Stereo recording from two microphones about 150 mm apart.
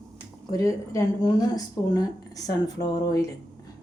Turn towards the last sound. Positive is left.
turn(degrees=25)  # may be behind; listen again after turning